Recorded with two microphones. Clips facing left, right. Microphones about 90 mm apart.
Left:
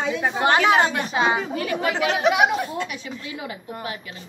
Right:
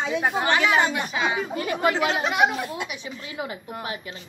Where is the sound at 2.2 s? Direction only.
10° left (ahead or behind).